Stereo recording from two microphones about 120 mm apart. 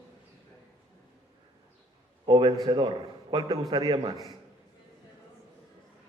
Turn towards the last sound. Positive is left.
turn(degrees=-30)  # may be behind; listen again after turning